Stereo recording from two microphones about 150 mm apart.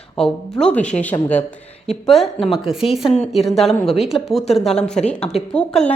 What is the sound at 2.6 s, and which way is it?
Speech, 40° left (ahead or behind).